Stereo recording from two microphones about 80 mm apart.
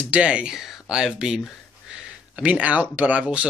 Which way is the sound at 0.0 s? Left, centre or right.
Centre.